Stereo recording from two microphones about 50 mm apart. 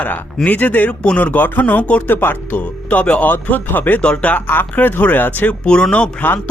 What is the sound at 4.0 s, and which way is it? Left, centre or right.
Speech, left.